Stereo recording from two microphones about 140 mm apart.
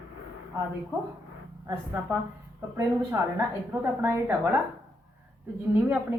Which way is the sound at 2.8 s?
20° right (ahead or behind).